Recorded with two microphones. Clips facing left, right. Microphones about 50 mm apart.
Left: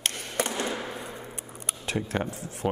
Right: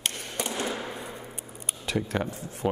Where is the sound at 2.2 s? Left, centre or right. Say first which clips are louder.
Even; left.